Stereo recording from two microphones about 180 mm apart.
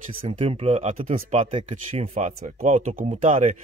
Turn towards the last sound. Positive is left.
turn(degrees=-40)  # may be behind; listen again after turning